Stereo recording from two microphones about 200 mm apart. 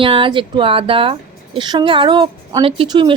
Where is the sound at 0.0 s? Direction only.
25° right (ahead or behind).